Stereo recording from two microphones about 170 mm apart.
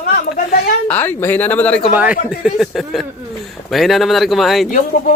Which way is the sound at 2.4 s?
Centre (ahead or behind).